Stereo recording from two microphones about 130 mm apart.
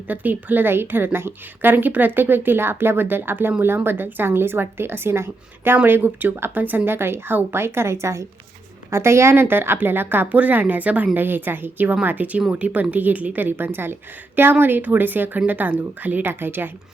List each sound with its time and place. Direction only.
0.1 s a woman's voice: 15° right (ahead or behind)